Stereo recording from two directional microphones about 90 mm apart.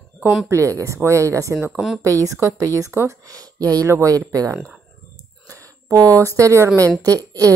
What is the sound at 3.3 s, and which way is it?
Speech, 40° right (ahead or behind).